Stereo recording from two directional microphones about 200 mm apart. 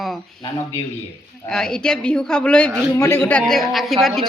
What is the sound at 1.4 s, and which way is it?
A woman's voice, 5° left (ahead or behind).